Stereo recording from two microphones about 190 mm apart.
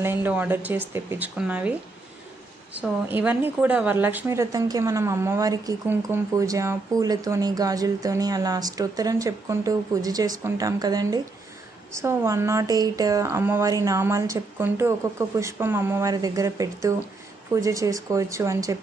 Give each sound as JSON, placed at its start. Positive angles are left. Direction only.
{"t": 0.0, "sound": "a woman's voice", "side_deg": -10}